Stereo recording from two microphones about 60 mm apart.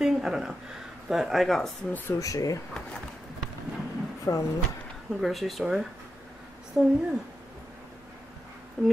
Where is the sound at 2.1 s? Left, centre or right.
Left.